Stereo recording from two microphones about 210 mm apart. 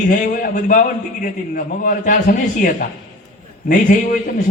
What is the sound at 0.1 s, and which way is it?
A man's voice, 40° left (ahead or behind).